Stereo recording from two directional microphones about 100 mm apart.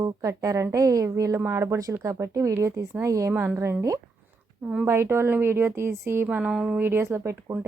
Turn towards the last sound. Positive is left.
turn(degrees=-30)  # may be behind; listen again after turning